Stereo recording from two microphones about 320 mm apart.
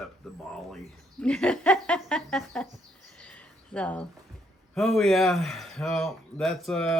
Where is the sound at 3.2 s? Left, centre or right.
Centre.